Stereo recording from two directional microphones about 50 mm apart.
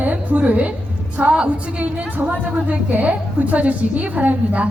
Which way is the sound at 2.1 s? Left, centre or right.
Right.